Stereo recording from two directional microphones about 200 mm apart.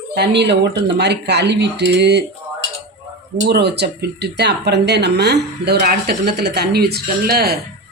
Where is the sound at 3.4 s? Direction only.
55° right (ahead or behind).